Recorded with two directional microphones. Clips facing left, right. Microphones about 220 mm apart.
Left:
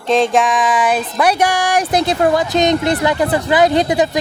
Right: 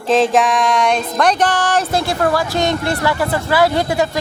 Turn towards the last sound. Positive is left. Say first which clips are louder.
# left 2 dB
turn(degrees=20)  # may be behind; listen again after turning